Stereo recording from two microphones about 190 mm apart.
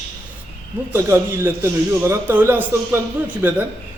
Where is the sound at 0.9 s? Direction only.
15° right (ahead or behind).